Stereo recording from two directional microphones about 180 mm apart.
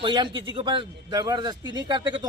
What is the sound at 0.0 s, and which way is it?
Speech, 25° right (ahead or behind).